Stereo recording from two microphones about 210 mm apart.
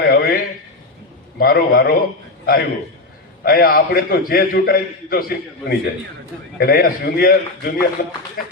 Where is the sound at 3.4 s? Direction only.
45° left (ahead or behind).